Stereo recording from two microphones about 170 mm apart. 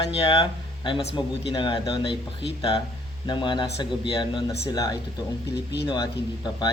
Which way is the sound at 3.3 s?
25° left (ahead or behind).